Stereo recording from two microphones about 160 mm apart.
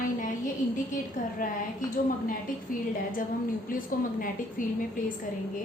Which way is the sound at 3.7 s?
60° left (ahead or behind).